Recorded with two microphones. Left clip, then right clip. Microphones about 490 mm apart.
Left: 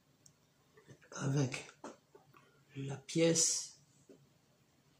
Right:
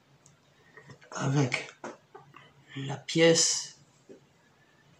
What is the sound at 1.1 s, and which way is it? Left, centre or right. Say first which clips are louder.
Speech: right 9 dB; right.